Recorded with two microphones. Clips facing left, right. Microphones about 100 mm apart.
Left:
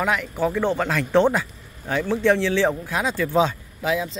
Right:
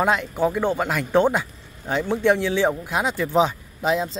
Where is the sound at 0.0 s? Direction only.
25° right (ahead or behind).